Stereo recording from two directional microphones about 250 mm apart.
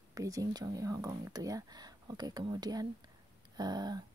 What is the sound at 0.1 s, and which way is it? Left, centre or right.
Speech, centre.